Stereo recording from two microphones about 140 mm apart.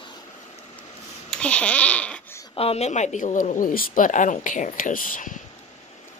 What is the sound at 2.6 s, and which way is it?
Speech, 50° left (ahead or behind).